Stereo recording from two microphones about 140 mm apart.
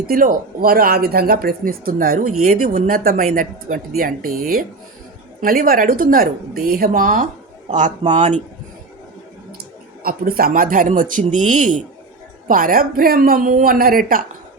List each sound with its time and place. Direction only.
0.1 s speech: 85° right
7.7 s a man's voice: 60° right (ahead or behind)
10.0 s speech: 90° right; by 11.8 s 65° right (ahead or behind)
12.5 s speech: 85° right